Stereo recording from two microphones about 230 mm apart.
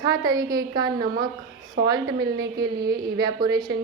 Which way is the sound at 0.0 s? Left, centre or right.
Centre.